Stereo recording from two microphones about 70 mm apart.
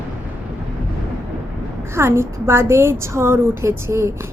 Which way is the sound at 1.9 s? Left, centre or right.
Right.